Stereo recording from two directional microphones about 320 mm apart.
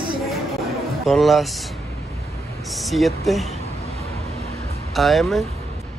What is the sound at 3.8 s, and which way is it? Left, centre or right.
Vehicle, centre.